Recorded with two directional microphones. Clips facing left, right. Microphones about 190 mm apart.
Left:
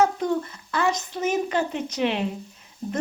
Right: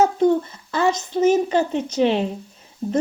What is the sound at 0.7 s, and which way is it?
Speech, 30° right (ahead or behind).